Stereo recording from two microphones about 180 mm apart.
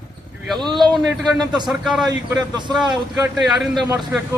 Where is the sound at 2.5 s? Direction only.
25° right (ahead or behind).